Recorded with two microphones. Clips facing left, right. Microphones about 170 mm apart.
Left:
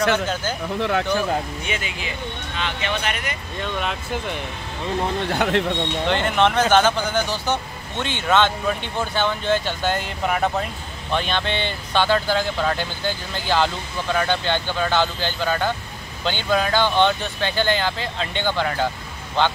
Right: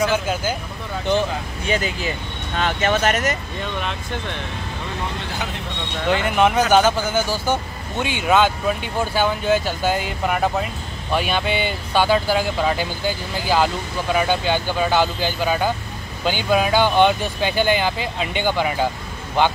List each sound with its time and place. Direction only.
0.1 s a man's voice: 10° right (ahead or behind)
0.7 s speech: 75° left (ahead or behind)
1.7 s speech: 40° right (ahead or behind)
3.8 s speech: 5° left (ahead or behind)
5.3 s speech: 60° left (ahead or behind)
6.0 s a man's voice: 5° right (ahead or behind)